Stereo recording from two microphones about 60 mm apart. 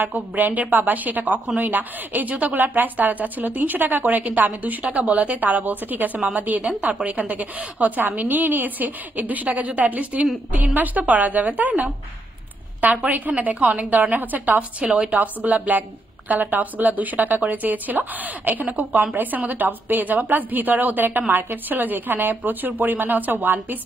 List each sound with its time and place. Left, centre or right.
0.0 s a woman's voice: right
14.9 s speech: centre
15.1 s a woman's voice: right